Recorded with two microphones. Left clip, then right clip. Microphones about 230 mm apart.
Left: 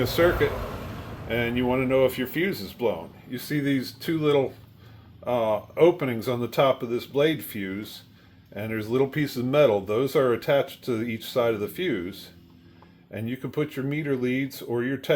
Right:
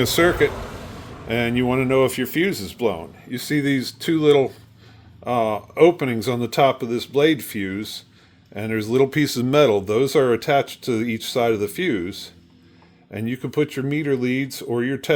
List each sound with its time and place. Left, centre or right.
0.0 s speech: right